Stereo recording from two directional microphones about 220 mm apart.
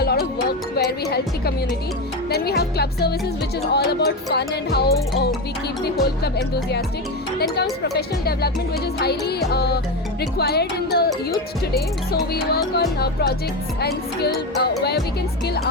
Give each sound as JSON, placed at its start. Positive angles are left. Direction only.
{"t": 0.0, "sound": "music", "side_deg": 45}
{"t": 0.8, "sound": "speech", "side_deg": 45}
{"t": 12.3, "sound": "speech", "side_deg": 45}
{"t": 14.6, "sound": "speech", "side_deg": 45}